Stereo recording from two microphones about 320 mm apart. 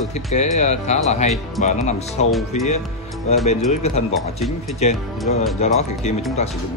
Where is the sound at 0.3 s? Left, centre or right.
Left.